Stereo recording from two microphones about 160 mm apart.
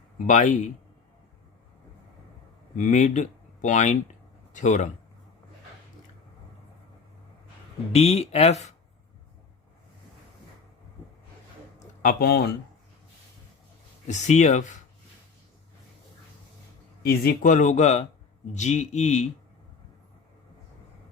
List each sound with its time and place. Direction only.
0.3 s speech: 50° left (ahead or behind)
2.7 s speech: 50° left (ahead or behind)
7.9 s speech: 40° left (ahead or behind)
11.8 s a sound: 65° left (ahead or behind)
14.1 s speech: 45° left (ahead or behind)
17.0 s speech: 65° left (ahead or behind); by 19.3 s 45° left (ahead or behind)